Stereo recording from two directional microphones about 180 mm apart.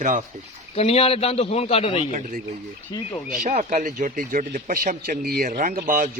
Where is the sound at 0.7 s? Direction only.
35° left (ahead or behind).